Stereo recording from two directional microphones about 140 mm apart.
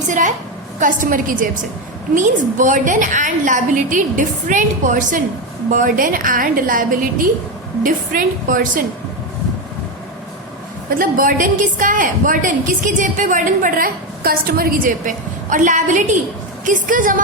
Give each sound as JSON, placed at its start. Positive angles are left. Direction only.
{"t": 0.1, "sound": "a woman's voice", "side_deg": -65}
{"t": 0.8, "sound": "a woman's voice", "side_deg": -75}
{"t": 2.1, "sound": "a woman's voice", "side_deg": -65}
{"t": 7.9, "sound": "a woman's voice", "side_deg": -70}
{"t": 10.8, "sound": "a woman's voice", "side_deg": -85}